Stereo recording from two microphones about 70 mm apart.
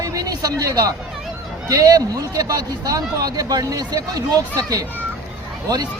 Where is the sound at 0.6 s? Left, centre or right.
Right.